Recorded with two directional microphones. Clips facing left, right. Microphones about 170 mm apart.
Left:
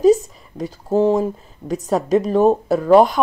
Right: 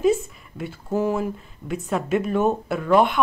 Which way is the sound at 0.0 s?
40° left (ahead or behind).